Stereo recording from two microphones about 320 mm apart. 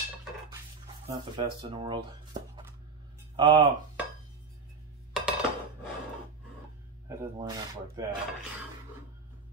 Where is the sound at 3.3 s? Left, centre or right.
Centre.